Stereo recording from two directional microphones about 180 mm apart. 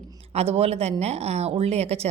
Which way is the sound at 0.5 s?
35° right (ahead or behind).